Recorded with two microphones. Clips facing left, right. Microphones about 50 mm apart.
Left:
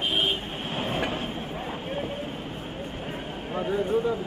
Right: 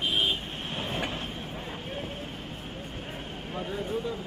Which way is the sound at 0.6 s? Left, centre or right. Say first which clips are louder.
Left 5 dB; centre.